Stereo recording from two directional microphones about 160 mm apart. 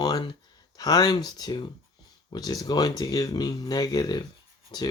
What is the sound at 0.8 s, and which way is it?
Speech, 25° left (ahead or behind).